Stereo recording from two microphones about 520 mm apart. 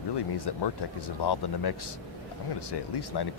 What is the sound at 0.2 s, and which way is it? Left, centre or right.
Speech, left.